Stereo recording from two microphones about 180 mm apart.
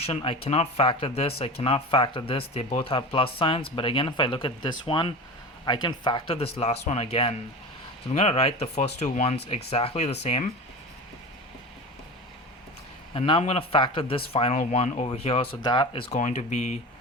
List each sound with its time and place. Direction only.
0.0 s speech: 30° left (ahead or behind)
13.1 s speech: 30° left (ahead or behind)
16.1 s speech: 40° left (ahead or behind)